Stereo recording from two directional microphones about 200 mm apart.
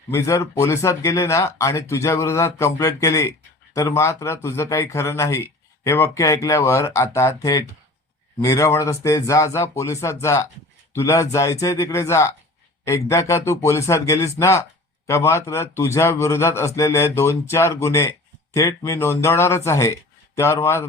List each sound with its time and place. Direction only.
0.1 s speech: 15° left (ahead or behind)